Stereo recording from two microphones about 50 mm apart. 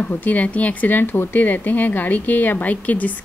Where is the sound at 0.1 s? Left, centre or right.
Left.